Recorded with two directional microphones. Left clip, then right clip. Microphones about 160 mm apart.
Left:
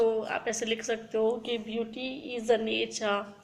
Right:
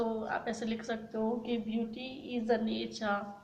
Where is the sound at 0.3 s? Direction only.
45° left (ahead or behind).